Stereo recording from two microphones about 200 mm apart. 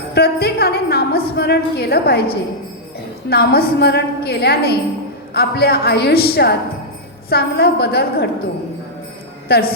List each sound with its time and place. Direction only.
0.1 s a woman's voice: 50° left (ahead or behind)
9.5 s a woman's voice: 50° left (ahead or behind)